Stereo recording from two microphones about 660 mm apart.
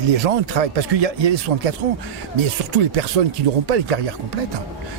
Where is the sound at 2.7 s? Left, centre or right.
Right.